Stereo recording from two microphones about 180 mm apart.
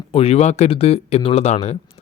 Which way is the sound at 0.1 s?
35° left (ahead or behind).